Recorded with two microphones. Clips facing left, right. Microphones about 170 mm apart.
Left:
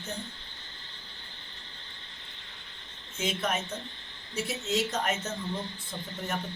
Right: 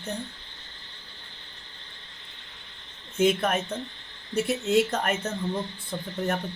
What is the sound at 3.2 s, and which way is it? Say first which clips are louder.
Speech: right 8 dB; 55° right (ahead or behind).